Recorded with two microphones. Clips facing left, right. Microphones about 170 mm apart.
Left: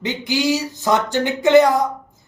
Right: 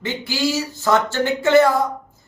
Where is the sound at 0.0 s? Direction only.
20° left (ahead or behind).